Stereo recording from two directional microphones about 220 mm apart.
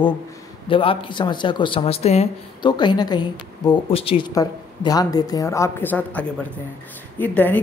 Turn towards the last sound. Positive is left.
turn(degrees=10)  # may be behind; listen again after turning